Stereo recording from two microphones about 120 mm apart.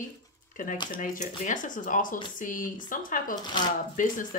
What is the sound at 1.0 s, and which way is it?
Speech, 85° left.